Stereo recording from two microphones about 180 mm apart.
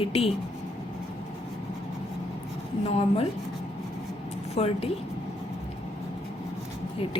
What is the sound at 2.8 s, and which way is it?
Speech, 35° left (ahead or behind).